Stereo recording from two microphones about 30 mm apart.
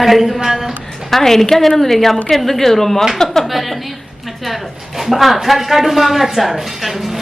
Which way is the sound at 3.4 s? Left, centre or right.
Centre.